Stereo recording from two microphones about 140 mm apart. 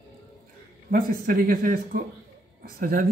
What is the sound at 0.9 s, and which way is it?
Speech, 90° right.